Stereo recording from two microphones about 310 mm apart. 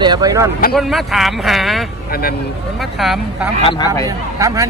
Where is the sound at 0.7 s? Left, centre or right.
Centre.